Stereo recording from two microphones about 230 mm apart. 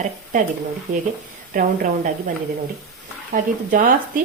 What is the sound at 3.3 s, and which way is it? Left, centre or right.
Speech, right.